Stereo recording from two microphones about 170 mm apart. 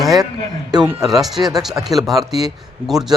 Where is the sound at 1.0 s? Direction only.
Centre (ahead or behind).